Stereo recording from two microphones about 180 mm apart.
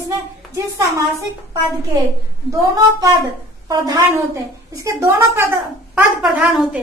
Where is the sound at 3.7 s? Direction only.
20° right (ahead or behind).